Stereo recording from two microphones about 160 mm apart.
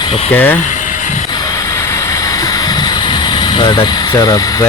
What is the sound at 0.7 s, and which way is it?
Vehicle, 55° left (ahead or behind).